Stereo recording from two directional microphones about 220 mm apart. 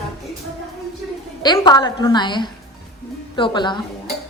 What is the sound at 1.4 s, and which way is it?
A woman's voice, 20° left (ahead or behind).